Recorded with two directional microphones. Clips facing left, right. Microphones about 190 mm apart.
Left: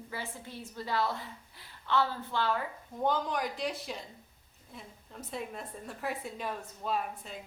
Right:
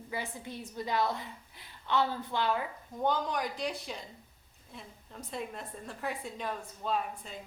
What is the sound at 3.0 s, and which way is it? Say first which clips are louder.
A woman's voice: even; centre (ahead or behind).